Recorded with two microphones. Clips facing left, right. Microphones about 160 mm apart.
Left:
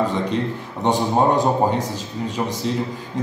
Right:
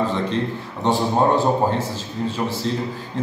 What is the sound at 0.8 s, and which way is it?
A man's voice, 15° left (ahead or behind).